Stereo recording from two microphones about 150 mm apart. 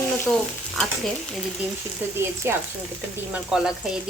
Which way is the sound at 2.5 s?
15° right (ahead or behind).